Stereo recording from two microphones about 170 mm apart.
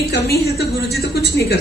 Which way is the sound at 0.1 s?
75° left (ahead or behind).